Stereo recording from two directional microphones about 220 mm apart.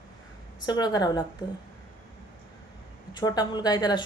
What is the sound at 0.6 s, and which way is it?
Speech, 20° left (ahead or behind).